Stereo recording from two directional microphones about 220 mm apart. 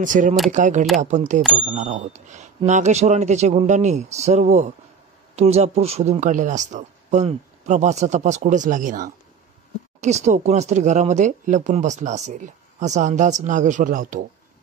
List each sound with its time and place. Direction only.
0.0 s speech: 35° right (ahead or behind)